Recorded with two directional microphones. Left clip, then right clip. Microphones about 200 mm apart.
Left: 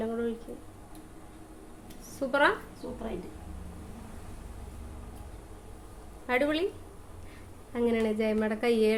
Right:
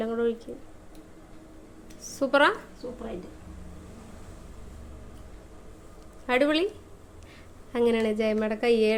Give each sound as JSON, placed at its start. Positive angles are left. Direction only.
{"t": 0.0, "sound": "a sound", "side_deg": -25}
{"t": 2.1, "sound": "a woman's voice", "side_deg": -25}
{"t": 6.2, "sound": "a woman's voice", "side_deg": -25}
{"t": 7.7, "sound": "a woman's voice", "side_deg": -30}